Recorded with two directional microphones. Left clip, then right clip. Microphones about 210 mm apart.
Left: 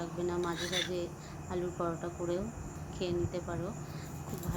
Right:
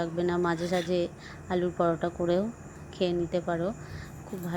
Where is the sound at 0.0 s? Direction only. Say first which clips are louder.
Right 7 dB; 30° right (ahead or behind).